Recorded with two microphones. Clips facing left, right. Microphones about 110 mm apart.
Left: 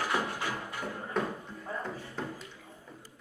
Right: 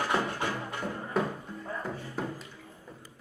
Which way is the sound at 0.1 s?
10° left (ahead or behind).